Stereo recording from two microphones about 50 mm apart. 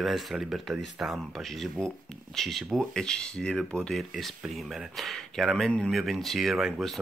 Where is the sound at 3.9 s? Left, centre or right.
Centre.